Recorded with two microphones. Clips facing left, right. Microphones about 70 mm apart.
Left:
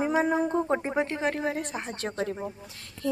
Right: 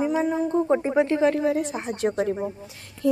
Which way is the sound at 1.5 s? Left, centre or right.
Centre.